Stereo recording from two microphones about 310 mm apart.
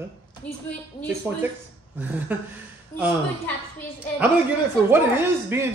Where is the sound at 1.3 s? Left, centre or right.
Centre.